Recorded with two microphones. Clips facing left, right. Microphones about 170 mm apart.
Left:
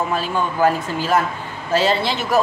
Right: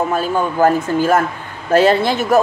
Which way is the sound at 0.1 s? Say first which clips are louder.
Right 4 dB; 45° right (ahead or behind).